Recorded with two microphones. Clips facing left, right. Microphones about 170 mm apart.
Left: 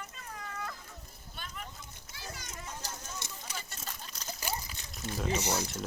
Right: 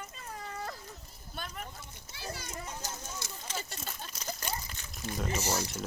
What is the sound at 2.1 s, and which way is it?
Children playing, 30° right (ahead or behind).